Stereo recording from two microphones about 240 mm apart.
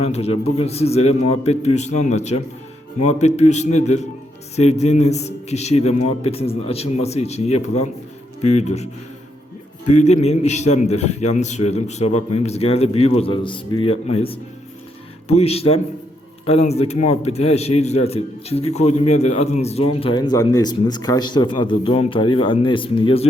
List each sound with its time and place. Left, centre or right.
0.0 s a man's voice: left